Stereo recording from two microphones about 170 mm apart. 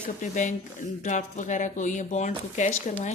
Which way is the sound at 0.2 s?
45° left (ahead or behind).